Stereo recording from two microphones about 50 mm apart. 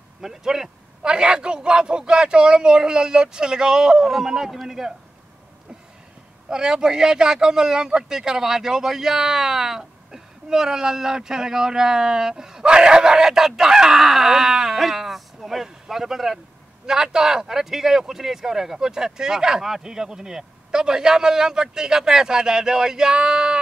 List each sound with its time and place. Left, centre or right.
0.2 s speech: centre
6.5 s speech: centre